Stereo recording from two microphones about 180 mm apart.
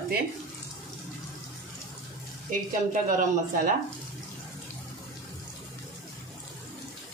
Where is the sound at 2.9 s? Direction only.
50° right (ahead or behind).